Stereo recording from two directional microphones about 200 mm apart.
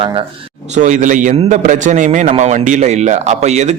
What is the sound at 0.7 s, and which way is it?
A man's voice, 35° right (ahead or behind).